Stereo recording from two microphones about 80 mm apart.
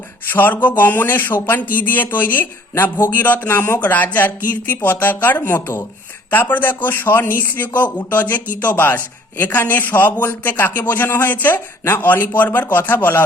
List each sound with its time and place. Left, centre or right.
0.3 s a man's voice: left